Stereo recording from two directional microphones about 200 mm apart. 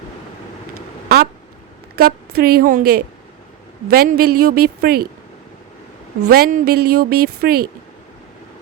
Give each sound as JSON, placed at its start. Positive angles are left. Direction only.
{"t": 1.0, "sound": "a sound", "side_deg": -55}
{"t": 2.0, "sound": "a woman's voice", "side_deg": -50}
{"t": 6.3, "sound": "a woman's voice", "side_deg": -50}